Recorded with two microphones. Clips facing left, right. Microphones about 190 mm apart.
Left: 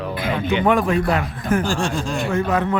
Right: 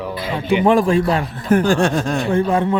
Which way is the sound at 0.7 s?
30° right (ahead or behind).